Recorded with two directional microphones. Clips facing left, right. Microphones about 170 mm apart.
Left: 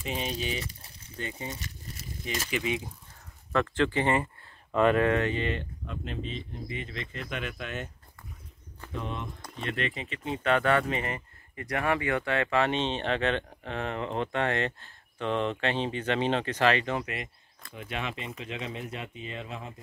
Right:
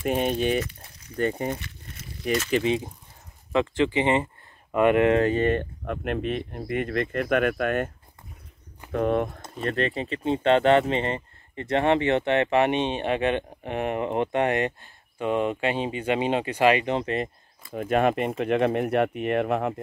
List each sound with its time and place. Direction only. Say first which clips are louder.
0.0 s speech: right 9 dB; 55° right (ahead or behind)
2.5 s speech: right 6 dB; 30° right (ahead or behind)
3.5 s speech: right 4 dB; 15° right (ahead or behind)
5.0 s speech: right 6 dB; 30° right (ahead or behind)
5.3 s speech: right 8 dB; 50° right (ahead or behind)
8.9 s speech: right 13 dB; 55° right (ahead or behind)
9.7 s speech: right 7 dB; 35° right (ahead or behind); by 16.9 s 15° right (ahead or behind)
16.9 s speech: right 7 dB; 35° right (ahead or behind)
17.7 s speech: right 14 dB; 50° right (ahead or behind); by 19.7 s 65° right (ahead or behind)